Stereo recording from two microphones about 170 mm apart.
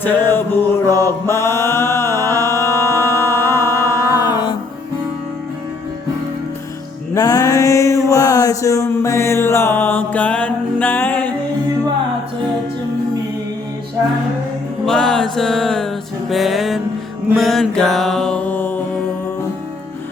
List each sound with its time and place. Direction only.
0.0 s mantra: 10° left (ahead or behind)
7.1 s mantra: 20° left (ahead or behind)
14.8 s music: 5° left (ahead or behind)
17.3 s mantra: centre (ahead or behind)